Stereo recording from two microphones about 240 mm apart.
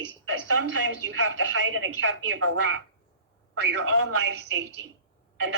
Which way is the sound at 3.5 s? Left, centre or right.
Right.